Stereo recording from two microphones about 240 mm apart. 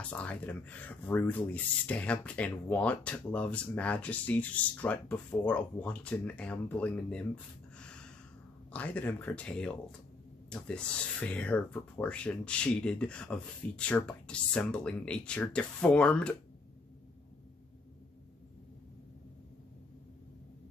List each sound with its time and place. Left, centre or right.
0.1 s speech: centre
7.8 s gasp: centre
8.7 s speech: centre